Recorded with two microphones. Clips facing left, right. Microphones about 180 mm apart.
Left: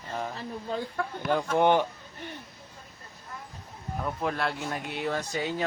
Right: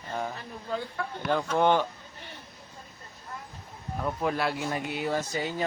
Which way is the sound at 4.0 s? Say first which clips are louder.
Right 2 dB; centre (ahead or behind).